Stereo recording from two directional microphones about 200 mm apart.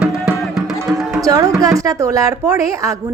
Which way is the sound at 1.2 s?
15° right (ahead or behind).